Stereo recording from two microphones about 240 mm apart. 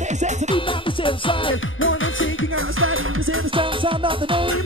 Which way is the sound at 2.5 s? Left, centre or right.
Right.